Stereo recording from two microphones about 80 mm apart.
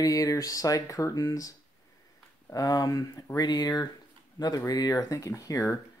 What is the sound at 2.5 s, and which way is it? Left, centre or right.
Speech, left.